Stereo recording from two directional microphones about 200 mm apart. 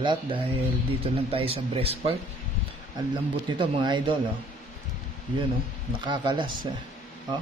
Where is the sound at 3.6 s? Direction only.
25° right (ahead or behind).